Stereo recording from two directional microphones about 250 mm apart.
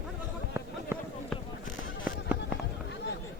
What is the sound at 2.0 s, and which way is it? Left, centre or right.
Fireworks, centre.